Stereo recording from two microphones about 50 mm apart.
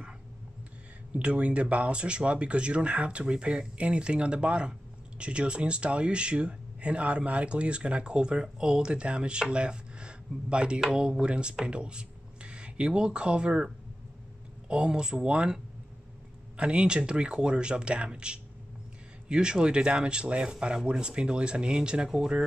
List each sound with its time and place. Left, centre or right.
1.1 s speech: right
14.7 s speech: centre
16.5 s speech: right